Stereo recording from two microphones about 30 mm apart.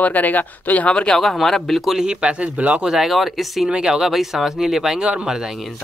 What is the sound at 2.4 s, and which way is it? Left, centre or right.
Speech, right.